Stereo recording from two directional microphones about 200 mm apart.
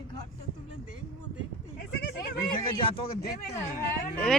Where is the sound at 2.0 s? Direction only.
50° left (ahead or behind).